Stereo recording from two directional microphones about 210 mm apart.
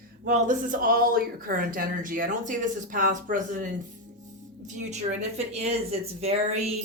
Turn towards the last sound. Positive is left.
turn(degrees=-30)  # may be behind; listen again after turning